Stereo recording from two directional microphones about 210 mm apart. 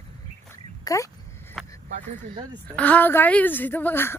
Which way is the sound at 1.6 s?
5° left (ahead or behind).